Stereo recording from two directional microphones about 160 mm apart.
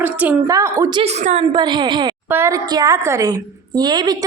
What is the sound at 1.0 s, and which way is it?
Speech, 45° right (ahead or behind).